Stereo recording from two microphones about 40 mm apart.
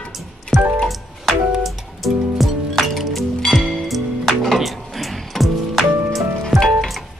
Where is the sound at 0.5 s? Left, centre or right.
Centre.